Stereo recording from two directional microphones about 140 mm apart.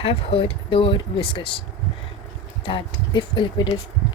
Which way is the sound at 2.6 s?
40° left (ahead or behind).